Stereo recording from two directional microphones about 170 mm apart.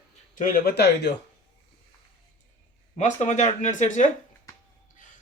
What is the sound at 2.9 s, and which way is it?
Speech, 45° left (ahead or behind).